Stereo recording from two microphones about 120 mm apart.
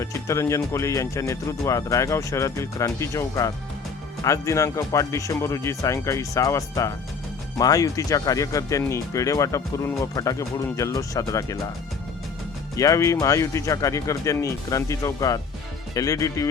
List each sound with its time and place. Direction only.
0.0 s speech: 25° left (ahead or behind)
12.7 s speech: 25° left (ahead or behind)